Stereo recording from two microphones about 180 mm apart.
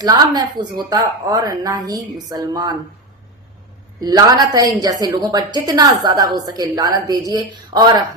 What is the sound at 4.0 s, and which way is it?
A woman's voice, 20° right (ahead or behind).